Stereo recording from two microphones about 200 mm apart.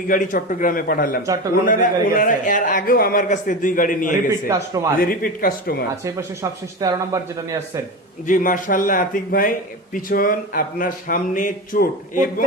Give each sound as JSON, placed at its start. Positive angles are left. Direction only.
{"t": 0.1, "sound": "a man's voice", "side_deg": 40}
{"t": 4.4, "sound": "speech", "side_deg": -15}
{"t": 4.9, "sound": "a man's voice", "side_deg": 45}
{"t": 6.7, "sound": "speech", "side_deg": -15}
{"t": 8.3, "sound": "a man's voice", "side_deg": 40}